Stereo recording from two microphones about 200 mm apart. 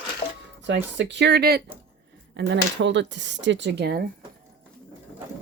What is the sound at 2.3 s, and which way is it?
Speech, 60° right (ahead or behind).